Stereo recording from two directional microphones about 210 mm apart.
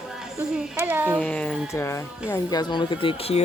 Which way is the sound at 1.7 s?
15° left (ahead or behind).